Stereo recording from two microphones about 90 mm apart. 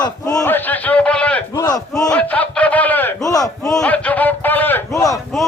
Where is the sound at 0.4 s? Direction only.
20° left (ahead or behind).